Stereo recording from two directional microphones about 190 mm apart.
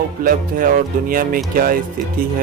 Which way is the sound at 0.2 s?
45° right (ahead or behind).